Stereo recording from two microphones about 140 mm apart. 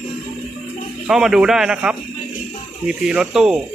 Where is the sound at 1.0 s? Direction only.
5° right (ahead or behind).